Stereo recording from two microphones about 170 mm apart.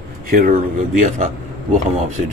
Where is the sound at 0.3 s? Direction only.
55° right (ahead or behind).